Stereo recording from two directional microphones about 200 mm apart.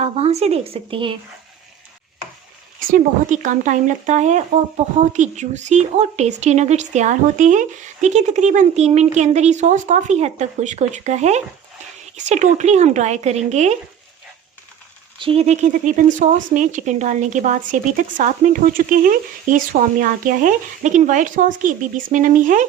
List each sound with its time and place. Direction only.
0.0 s speech: 30° right (ahead or behind)
2.9 s a woman's voice: 40° right (ahead or behind)
15.2 s a woman's voice: 30° right (ahead or behind)